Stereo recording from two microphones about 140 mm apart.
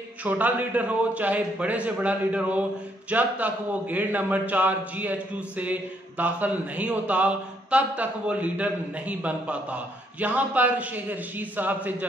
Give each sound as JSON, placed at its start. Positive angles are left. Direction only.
{"t": 0.2, "sound": "speech", "side_deg": -10}